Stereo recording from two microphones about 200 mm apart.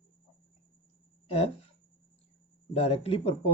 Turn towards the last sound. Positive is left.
turn(degrees=30)  # may be behind; listen again after turning